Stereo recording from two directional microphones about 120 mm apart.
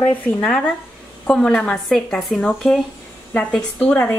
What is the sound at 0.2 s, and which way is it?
Speech, 10° left (ahead or behind).